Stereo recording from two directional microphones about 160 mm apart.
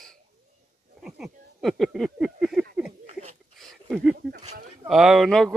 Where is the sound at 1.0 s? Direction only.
5° right (ahead or behind).